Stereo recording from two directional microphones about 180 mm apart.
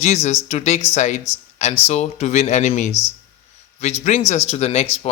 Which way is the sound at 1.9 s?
40° left (ahead or behind).